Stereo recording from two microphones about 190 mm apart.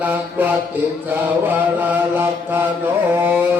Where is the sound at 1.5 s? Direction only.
10° right (ahead or behind).